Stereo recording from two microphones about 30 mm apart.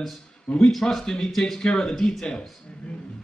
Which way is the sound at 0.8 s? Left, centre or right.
Centre.